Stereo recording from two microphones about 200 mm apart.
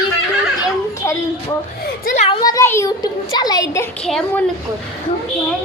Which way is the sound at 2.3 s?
20° left (ahead or behind).